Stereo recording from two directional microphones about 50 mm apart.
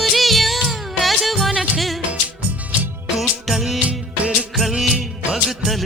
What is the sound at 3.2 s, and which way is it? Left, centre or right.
Music, centre.